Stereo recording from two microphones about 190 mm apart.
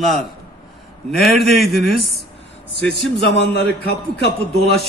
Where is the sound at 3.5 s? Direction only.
60° left (ahead or behind).